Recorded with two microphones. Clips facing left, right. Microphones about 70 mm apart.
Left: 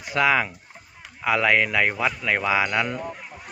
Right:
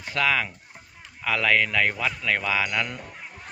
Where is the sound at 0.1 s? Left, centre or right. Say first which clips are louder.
Left 4 dB; centre.